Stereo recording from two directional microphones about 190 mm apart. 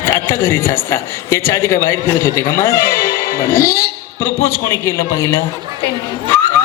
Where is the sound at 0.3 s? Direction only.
15° left (ahead or behind).